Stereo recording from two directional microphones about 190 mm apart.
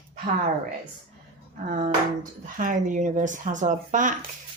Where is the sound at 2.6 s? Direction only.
45° right (ahead or behind).